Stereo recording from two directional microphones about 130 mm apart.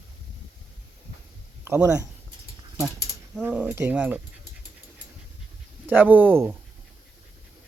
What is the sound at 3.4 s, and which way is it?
Speech, 15° right (ahead or behind).